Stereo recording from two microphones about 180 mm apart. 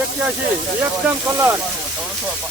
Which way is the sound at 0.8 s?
10° right (ahead or behind).